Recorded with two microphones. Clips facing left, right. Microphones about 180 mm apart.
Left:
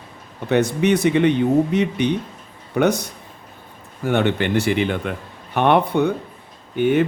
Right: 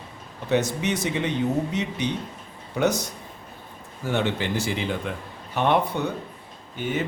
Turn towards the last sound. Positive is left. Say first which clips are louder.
# left 10 dB
turn(degrees=60)  # may be behind; listen again after turning